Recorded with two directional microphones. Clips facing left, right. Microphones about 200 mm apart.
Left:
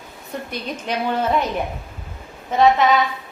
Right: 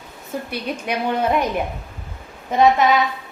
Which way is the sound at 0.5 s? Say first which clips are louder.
Right 1 dB; 10° right (ahead or behind).